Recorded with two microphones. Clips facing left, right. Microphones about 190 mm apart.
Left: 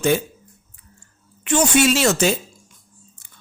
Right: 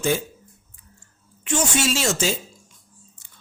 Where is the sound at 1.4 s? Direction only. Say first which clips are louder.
Left 6 dB; 65° left (ahead or behind).